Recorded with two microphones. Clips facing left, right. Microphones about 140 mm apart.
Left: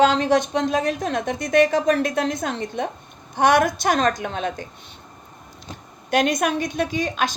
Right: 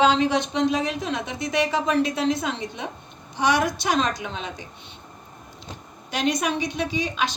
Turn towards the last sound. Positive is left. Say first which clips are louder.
# left 2 dB
turn(degrees=45)  # may be behind; listen again after turning